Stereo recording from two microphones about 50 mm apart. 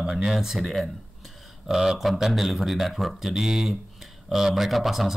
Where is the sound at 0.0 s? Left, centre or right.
Centre.